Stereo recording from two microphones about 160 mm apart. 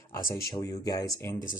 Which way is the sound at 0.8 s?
25° left (ahead or behind).